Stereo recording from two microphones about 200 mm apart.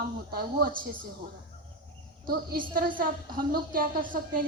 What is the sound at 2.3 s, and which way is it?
A woman's voice, 45° right (ahead or behind).